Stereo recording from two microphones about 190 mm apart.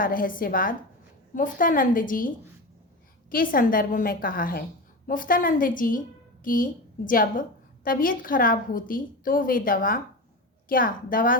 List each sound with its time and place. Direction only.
0.0 s a woman's voice: 50° left (ahead or behind)